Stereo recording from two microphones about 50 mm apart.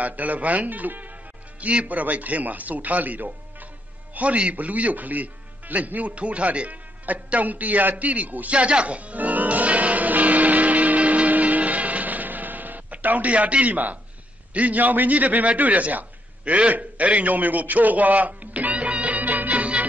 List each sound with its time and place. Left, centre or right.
0.0 s a man's voice: right
4.1 s music: right
14.5 s a man's voice: right